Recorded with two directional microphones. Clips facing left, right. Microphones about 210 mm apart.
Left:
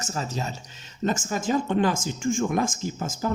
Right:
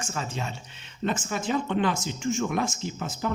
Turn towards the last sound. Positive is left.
turn(degrees=45)  # may be behind; listen again after turning